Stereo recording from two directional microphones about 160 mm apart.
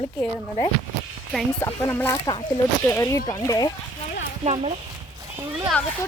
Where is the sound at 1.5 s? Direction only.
15° left (ahead or behind).